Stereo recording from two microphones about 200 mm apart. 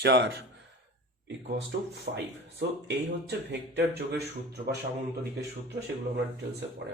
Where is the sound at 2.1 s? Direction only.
55° right (ahead or behind).